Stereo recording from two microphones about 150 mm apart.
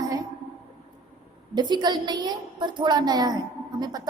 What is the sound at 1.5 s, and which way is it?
A woman's voice, 30° right (ahead or behind).